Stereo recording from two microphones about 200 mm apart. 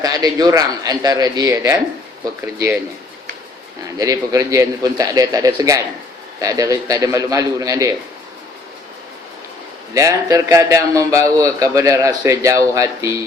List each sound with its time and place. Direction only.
0.0 s a man's voice: 20° right (ahead or behind)
3.9 s a man's voice: 15° right (ahead or behind)
9.9 s a man's voice: 15° right (ahead or behind)